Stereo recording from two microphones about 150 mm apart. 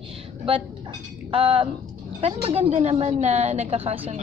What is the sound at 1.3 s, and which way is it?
A woman's voice, 35° right (ahead or behind).